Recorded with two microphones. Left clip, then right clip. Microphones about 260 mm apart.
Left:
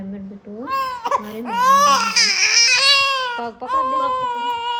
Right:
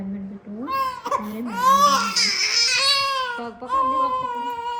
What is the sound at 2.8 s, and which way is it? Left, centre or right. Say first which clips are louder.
Baby cry: left 5 dB; centre.